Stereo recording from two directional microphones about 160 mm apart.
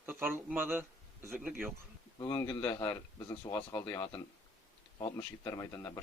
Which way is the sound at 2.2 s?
20° left (ahead or behind).